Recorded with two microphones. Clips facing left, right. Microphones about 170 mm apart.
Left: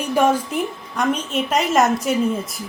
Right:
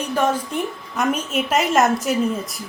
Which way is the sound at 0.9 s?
5° right (ahead or behind).